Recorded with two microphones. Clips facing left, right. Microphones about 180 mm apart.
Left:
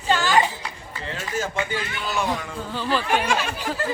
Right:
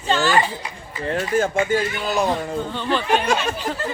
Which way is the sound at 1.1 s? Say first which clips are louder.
Right 8 dB; 55° right (ahead or behind).